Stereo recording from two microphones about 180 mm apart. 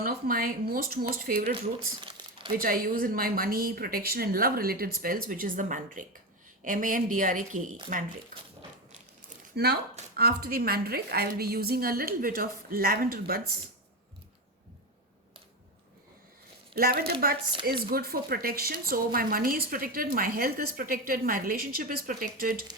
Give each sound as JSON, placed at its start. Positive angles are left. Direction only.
{"t": 0.0, "sound": "a woman's voice", "side_deg": -55}
{"t": 2.0, "sound": "crumpling", "side_deg": -25}
{"t": 2.6, "sound": "a woman's voice", "side_deg": -55}
{"t": 10.2, "sound": "a woman's voice", "side_deg": -60}
{"t": 16.7, "sound": "a woman's voice", "side_deg": -55}